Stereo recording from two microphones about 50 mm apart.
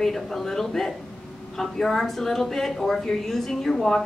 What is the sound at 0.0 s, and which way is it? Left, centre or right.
A woman's voice, centre.